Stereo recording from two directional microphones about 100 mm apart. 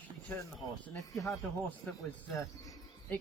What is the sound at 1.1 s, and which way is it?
Speech, centre (ahead or behind).